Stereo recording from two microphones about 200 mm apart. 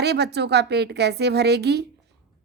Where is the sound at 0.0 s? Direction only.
55° right (ahead or behind).